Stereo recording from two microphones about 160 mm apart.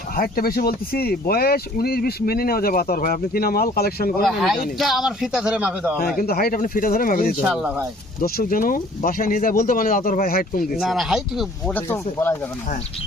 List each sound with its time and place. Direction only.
0.2 s speech: 70° left (ahead or behind)
4.2 s a man's voice: centre (ahead or behind)
6.1 s speech: 70° left (ahead or behind)
7.4 s speech: 5° right (ahead or behind)
8.2 s speech: 65° left (ahead or behind)
10.8 s a man's voice: centre (ahead or behind)
11.7 s speech: 15° left (ahead or behind)